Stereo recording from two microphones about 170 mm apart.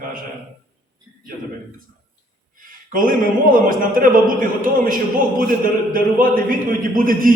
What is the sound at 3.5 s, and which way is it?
A man's voice, 55° right (ahead or behind).